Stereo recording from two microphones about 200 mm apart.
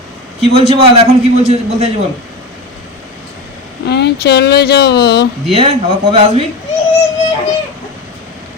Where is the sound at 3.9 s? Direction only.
55° left (ahead or behind).